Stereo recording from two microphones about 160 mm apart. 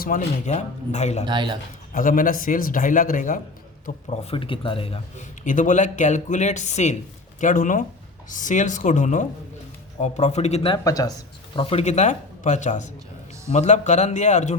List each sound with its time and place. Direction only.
0.0 s speech: 55° left (ahead or behind)
1.2 s a man's voice: 30° right (ahead or behind)
1.9 s speech: 55° left (ahead or behind)
4.2 s speech: 35° left (ahead or behind)
5.5 s speech: 50° left (ahead or behind)
10.8 s speech: 20° left (ahead or behind)
11.5 s speech: 35° left (ahead or behind)